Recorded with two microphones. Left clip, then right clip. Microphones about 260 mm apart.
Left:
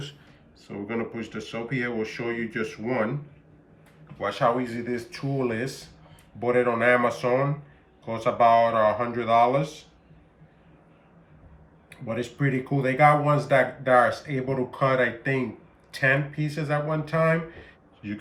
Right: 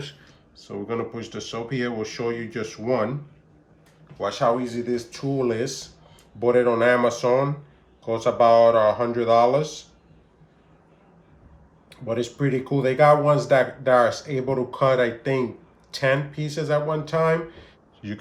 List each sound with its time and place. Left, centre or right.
0.7 s speech: right
4.2 s speech: centre
12.0 s speech: centre